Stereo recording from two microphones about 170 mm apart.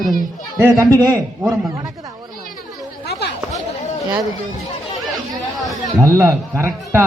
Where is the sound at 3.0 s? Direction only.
75° left (ahead or behind).